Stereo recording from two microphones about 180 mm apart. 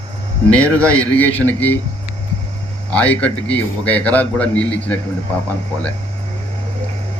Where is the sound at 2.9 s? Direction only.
10° left (ahead or behind).